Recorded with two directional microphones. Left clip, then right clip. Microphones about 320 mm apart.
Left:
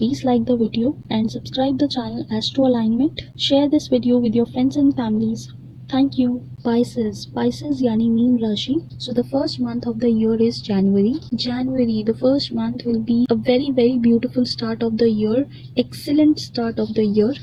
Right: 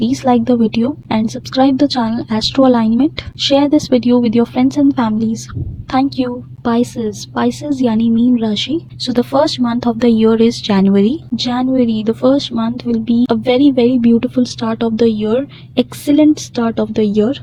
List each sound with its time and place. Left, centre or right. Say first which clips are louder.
0.0 s a woman's voice: right 6 dB; right
6.7 s a woman's voice: right 4 dB; right